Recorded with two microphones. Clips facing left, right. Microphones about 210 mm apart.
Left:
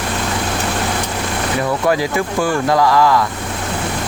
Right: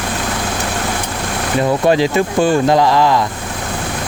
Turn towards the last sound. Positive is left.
turn(degrees=-25)  # may be behind; listen again after turning